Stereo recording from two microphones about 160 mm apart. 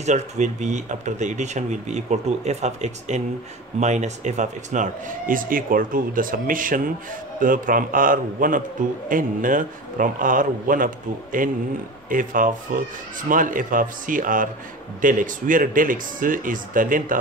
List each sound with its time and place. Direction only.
0.0 s speech: 45° right (ahead or behind)